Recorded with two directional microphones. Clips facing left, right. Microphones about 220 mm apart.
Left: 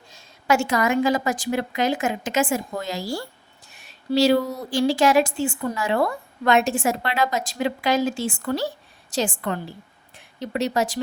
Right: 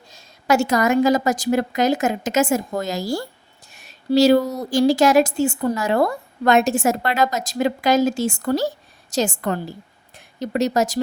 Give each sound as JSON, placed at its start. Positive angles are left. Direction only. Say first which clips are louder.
{"t": 0.1, "sound": "speech", "louder": "right 3 dB", "side_deg": -40}